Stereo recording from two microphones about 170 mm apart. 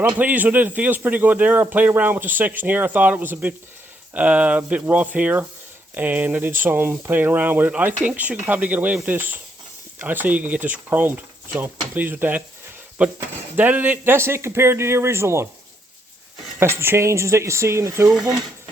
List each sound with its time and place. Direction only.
0.2 s speech: 10° right (ahead or behind)
16.6 s speech: 15° right (ahead or behind)